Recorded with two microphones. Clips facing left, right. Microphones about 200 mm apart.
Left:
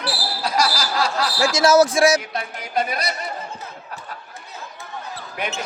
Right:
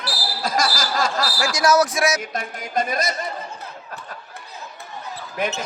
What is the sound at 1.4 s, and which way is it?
Speech, 25° left (ahead or behind).